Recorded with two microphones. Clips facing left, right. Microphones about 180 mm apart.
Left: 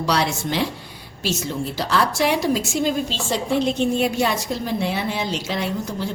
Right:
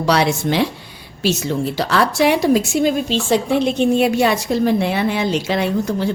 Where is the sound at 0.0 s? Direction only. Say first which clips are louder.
Right 5 dB; 65° right (ahead or behind).